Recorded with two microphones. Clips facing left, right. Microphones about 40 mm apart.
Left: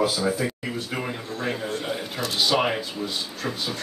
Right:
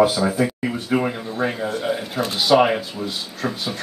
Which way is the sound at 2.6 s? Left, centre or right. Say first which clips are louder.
Right 5 dB; centre.